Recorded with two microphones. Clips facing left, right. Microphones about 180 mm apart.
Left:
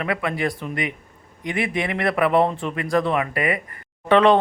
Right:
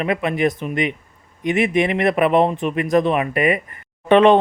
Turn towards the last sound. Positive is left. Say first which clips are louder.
# right 3 dB
turn(degrees=-20)  # may be behind; listen again after turning